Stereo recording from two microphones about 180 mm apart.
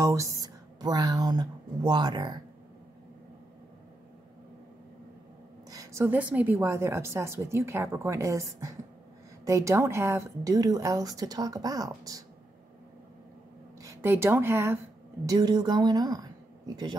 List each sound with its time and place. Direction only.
0.0 s speech: 15° right (ahead or behind)
5.7 s a woman's voice: 20° right (ahead or behind)
13.7 s speech: 15° right (ahead or behind)